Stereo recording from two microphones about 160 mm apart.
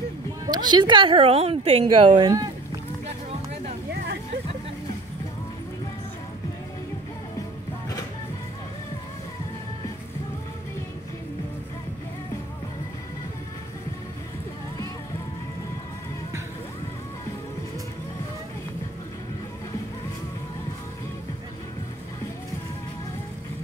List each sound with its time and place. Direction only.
0.5 s a woman's voice: 25° right (ahead or behind)